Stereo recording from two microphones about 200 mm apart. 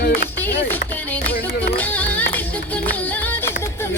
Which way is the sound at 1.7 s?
10° left (ahead or behind).